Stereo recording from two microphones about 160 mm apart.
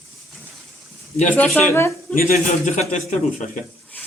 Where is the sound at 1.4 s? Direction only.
10° left (ahead or behind).